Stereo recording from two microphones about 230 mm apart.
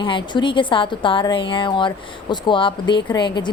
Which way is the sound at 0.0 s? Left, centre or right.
Left.